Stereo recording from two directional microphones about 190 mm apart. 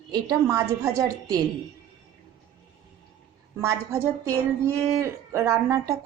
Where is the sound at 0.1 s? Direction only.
20° right (ahead or behind).